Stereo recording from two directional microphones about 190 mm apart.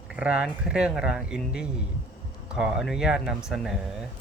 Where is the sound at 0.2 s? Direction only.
5° right (ahead or behind).